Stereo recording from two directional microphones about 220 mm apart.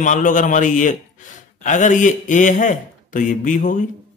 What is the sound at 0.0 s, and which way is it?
Speech, 35° left (ahead or behind).